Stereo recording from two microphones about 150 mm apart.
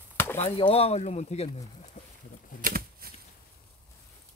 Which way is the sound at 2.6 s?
85° right.